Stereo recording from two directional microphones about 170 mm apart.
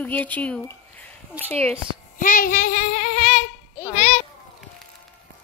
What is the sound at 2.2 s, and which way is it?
Child singing, 55° left (ahead or behind).